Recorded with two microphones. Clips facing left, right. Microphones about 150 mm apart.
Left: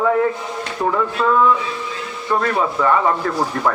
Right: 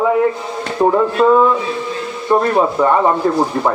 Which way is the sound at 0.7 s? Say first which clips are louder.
Right 7 dB; 30° right (ahead or behind).